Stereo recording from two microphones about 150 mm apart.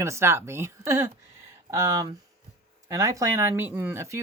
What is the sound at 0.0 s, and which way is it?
Speech, 20° right (ahead or behind).